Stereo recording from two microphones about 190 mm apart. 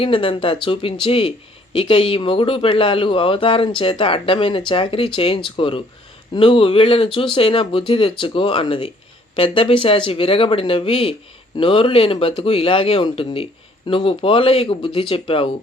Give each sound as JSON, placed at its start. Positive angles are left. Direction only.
{"t": 0.0, "sound": "a man's voice", "side_deg": 30}